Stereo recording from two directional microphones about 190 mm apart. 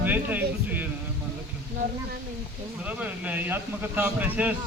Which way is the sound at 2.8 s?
5° right (ahead or behind).